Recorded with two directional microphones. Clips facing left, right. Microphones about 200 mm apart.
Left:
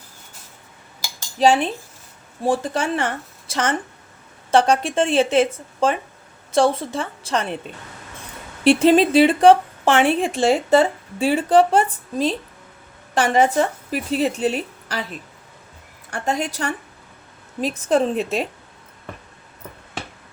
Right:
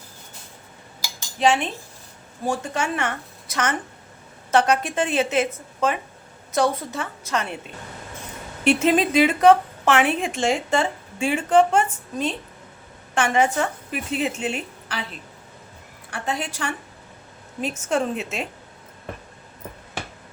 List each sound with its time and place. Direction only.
1.4 s a woman's voice: 35° left (ahead or behind)
8.6 s speech: 35° left (ahead or behind)
16.0 s speech: 40° left (ahead or behind)